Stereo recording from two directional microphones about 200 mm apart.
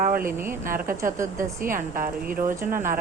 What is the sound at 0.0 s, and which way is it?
Speech, 45° right (ahead or behind).